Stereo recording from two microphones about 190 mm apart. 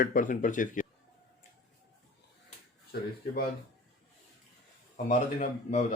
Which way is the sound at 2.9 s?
55° left (ahead or behind).